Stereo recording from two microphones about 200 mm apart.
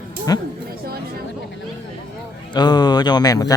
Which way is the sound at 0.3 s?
20° left (ahead or behind).